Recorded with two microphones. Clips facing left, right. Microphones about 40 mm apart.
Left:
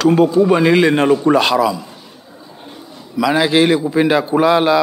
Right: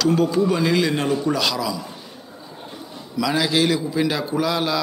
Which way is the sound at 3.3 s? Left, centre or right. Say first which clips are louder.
Left 7 dB; left.